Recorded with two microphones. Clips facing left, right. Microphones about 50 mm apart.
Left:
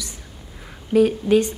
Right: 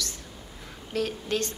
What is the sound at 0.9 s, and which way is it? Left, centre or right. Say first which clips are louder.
Speech: left 13 dB; centre.